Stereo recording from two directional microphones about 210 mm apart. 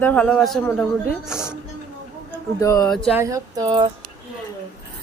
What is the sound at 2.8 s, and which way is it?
Speech, centre (ahead or behind).